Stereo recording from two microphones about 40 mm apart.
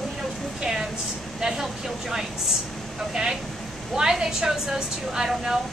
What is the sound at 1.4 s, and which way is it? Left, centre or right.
Speech, centre.